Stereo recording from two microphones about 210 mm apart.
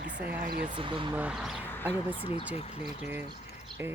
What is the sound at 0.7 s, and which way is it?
Speech, 25° right (ahead or behind).